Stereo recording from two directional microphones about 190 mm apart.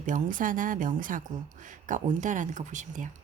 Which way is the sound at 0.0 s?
45° right (ahead or behind).